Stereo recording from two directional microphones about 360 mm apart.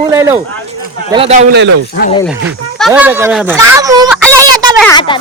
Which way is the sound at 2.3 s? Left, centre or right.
Centre.